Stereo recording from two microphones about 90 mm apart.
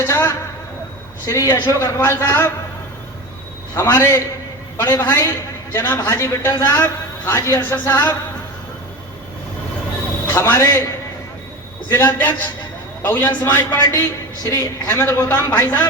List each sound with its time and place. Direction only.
0.0 s a man's voice: 30° left (ahead or behind)
3.8 s a man's voice: 30° left (ahead or behind)
10.2 s a man's voice: 30° left (ahead or behind)